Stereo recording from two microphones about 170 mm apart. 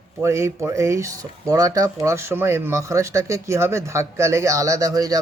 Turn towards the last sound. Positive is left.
turn(degrees=-20)  # may be behind; listen again after turning